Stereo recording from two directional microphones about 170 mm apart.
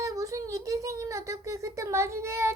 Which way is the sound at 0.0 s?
20° right (ahead or behind).